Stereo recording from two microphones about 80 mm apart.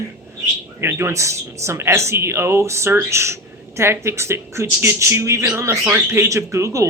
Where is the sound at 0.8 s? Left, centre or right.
Right.